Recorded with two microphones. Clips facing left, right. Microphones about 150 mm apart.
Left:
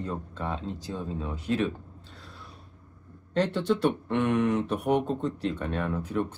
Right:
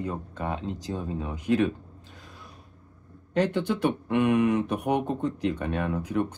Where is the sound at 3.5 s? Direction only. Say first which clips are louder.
Left 1 dB; 10° right (ahead or behind).